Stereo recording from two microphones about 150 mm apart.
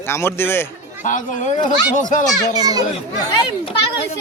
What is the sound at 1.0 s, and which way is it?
Speech, 60° left (ahead or behind).